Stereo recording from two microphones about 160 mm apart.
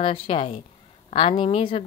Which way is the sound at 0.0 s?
35° left (ahead or behind).